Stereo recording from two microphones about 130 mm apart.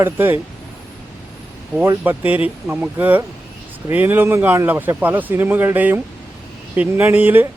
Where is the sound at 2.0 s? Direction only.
15° right (ahead or behind).